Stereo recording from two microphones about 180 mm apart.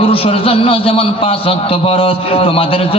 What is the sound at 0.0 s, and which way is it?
A man's voice, 30° left (ahead or behind).